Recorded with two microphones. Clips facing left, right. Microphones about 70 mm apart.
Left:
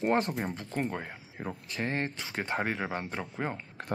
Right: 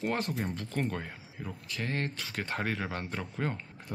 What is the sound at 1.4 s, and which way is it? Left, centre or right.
Speech, left.